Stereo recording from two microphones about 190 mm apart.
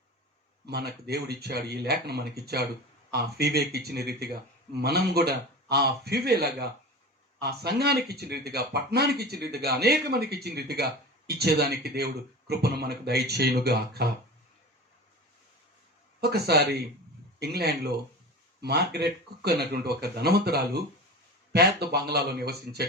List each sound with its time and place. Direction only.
0.6 s speech: 60° right (ahead or behind)
16.2 s speech: 55° right (ahead or behind)